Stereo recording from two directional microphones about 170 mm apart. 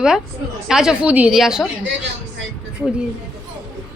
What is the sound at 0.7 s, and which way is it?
Speech, 5° right (ahead or behind).